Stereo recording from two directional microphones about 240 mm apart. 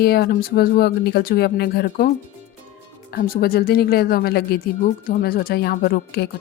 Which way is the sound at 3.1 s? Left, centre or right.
Left.